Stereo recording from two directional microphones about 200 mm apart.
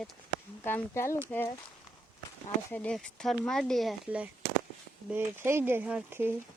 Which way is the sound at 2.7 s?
5° left (ahead or behind).